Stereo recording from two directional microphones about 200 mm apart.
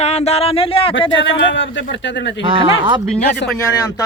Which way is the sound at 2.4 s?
25° right (ahead or behind).